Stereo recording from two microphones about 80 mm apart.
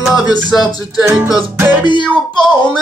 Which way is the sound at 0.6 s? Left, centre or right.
Left.